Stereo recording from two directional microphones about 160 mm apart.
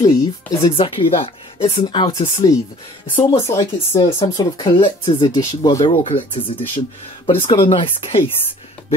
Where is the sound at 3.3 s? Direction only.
20° left (ahead or behind).